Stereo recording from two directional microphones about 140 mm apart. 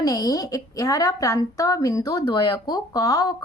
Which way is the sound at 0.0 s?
25° left (ahead or behind).